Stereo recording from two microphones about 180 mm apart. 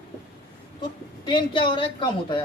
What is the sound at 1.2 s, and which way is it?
Speech, 25° left (ahead or behind).